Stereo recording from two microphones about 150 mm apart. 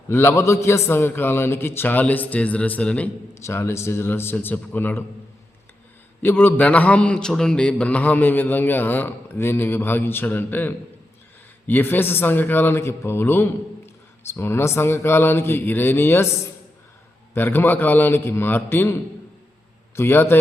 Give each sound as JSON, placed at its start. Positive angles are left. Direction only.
{"t": 0.1, "sound": "a man's voice", "side_deg": 15}
{"t": 6.2, "sound": "a man's voice", "side_deg": 15}
{"t": 17.3, "sound": "a man's voice", "side_deg": 15}
{"t": 20.0, "sound": "a man's voice", "side_deg": 15}